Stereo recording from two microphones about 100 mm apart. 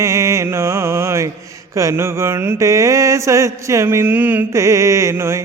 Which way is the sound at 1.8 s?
30° right (ahead or behind).